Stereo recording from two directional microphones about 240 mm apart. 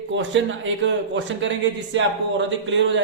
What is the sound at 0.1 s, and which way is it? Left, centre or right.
A man's voice, right.